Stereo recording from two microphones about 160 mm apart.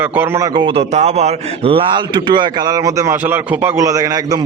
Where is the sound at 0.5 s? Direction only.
30° right (ahead or behind).